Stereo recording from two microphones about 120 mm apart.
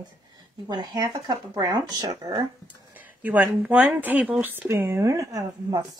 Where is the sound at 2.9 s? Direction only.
15° right (ahead or behind).